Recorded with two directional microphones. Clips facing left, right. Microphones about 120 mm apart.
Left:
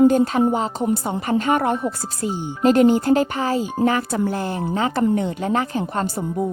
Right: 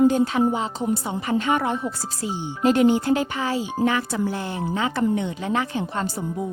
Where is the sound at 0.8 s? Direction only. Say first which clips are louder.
Left 3 dB; 55° left (ahead or behind).